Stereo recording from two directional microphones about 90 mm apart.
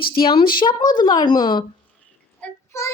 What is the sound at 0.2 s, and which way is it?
Speech, 65° left (ahead or behind).